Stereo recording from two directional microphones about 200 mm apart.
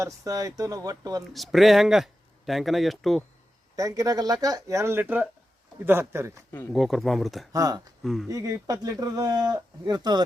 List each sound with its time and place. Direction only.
0.0 s speech: 15° right (ahead or behind)
1.3 s speech: centre (ahead or behind)
3.8 s speech: 15° right (ahead or behind)
6.7 s speech: centre (ahead or behind)
7.5 s speech: 15° right (ahead or behind)
8.0 s speech: centre (ahead or behind)
8.3 s speech: 15° right (ahead or behind)